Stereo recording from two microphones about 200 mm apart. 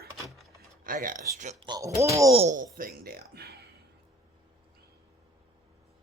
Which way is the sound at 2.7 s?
45° right (ahead or behind).